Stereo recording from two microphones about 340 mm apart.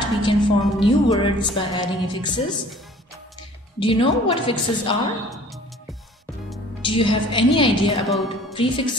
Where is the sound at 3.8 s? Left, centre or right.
Centre.